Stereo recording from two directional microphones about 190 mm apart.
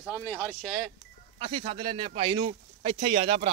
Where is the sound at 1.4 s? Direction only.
30° right (ahead or behind).